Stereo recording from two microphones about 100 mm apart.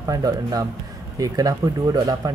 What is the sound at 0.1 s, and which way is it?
Speech, 35° right (ahead or behind).